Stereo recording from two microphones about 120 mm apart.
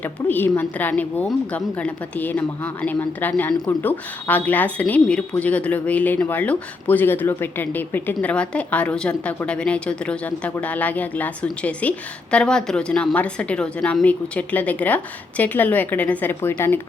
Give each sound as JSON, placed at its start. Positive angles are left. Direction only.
{"t": 0.0, "sound": "a woman's voice", "side_deg": 15}